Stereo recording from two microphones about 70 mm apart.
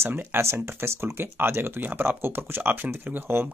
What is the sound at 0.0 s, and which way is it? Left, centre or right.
Speech, right.